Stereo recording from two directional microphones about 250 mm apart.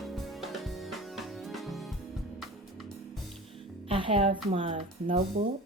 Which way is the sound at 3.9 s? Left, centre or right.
Right.